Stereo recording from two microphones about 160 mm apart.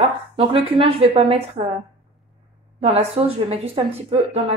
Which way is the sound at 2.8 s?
40° right (ahead or behind).